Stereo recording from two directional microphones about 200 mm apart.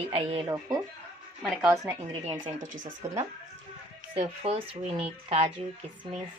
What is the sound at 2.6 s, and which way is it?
Speech, 40° right (ahead or behind).